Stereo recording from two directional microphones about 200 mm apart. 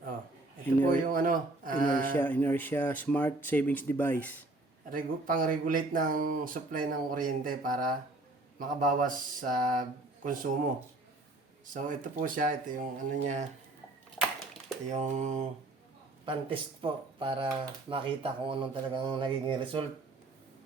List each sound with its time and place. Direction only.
0.9 s speech: 45° right (ahead or behind)
2.1 s speech: 10° left (ahead or behind)
4.9 s speech: 45° right (ahead or behind)
11.6 s speech: 40° right (ahead or behind)
14.2 s a sound: 5° right (ahead or behind)
14.8 s speech: 35° right (ahead or behind)
16.2 s speech: 25° right (ahead or behind)